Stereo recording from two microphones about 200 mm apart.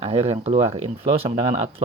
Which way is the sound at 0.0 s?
30° right (ahead or behind).